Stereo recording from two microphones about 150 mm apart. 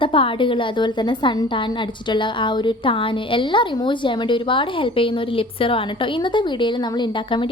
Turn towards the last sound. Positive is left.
turn(degrees=35)  # may be behind; listen again after turning